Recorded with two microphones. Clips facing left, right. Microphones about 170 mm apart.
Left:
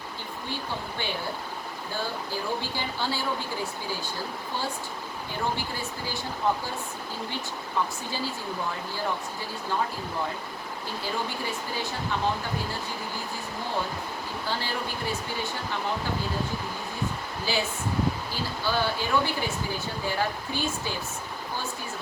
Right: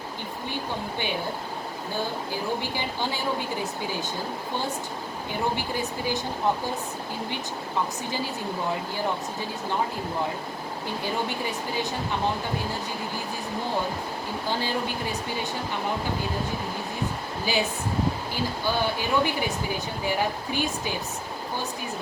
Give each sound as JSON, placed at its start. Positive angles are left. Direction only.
{"t": 2.6, "sound": "speech", "side_deg": -15}
{"t": 17.4, "sound": "speech", "side_deg": -15}